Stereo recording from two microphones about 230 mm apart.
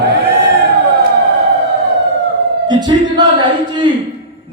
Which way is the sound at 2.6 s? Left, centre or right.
Centre.